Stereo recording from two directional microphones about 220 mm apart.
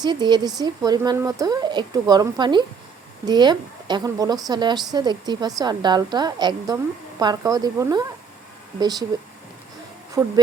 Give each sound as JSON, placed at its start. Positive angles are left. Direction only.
{"t": 0.0, "sound": "speech", "side_deg": -20}
{"t": 10.2, "sound": "speech", "side_deg": -15}